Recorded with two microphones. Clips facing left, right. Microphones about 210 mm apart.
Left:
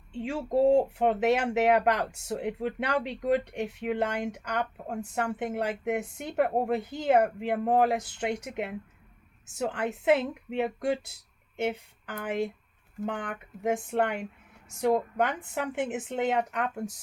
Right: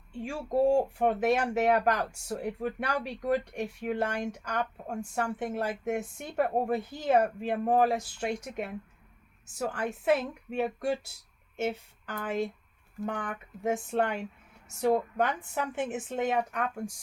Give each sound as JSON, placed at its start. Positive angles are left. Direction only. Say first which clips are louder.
{"t": 0.1, "sound": "speech", "louder": "left 3 dB", "side_deg": 25}